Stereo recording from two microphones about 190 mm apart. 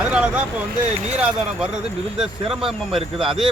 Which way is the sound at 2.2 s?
Centre (ahead or behind).